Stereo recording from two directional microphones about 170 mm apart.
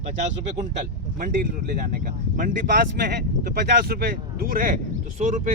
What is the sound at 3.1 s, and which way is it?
Speech, 70° right (ahead or behind).